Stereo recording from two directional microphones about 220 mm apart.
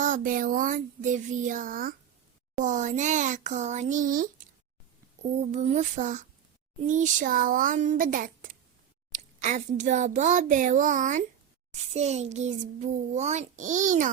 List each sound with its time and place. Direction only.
0.0 s a child's voice: 35° right (ahead or behind)